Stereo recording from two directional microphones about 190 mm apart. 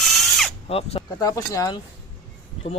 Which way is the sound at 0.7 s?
30° left (ahead or behind).